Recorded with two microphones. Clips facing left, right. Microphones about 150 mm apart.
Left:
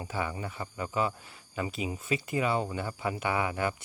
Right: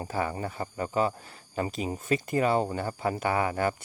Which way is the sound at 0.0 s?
40° right (ahead or behind).